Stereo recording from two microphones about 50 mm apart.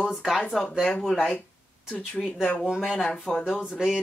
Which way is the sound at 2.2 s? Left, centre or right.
Centre.